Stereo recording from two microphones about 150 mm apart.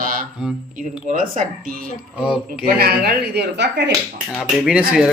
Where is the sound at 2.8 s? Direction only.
90° right.